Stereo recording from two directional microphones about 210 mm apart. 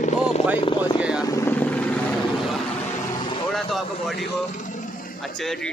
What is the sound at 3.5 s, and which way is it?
Speech, centre (ahead or behind).